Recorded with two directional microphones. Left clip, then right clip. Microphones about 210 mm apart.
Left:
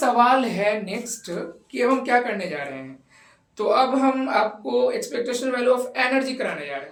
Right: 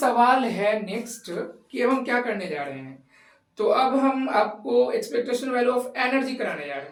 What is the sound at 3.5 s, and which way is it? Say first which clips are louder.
A woman's voice: left 1 dB; 40° left (ahead or behind).